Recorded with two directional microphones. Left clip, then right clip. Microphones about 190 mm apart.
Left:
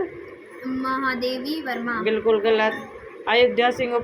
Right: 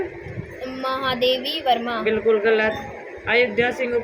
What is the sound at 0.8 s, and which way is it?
Music, 60° right (ahead or behind).